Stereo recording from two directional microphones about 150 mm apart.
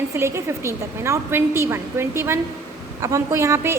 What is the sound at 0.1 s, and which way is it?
A woman's voice, 20° right (ahead or behind).